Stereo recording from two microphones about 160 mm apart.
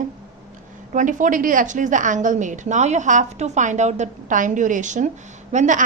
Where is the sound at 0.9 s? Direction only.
55° right (ahead or behind).